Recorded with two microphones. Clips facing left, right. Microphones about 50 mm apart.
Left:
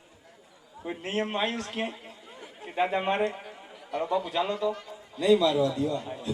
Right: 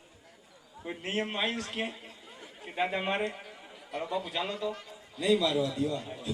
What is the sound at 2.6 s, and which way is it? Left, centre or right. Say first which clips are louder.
Speech: left 4 dB; centre.